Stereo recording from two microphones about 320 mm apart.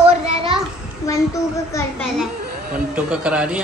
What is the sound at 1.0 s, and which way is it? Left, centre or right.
A child's voice, centre.